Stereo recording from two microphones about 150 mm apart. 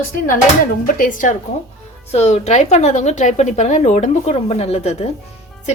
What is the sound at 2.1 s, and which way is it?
A woman's voice, 45° left (ahead or behind).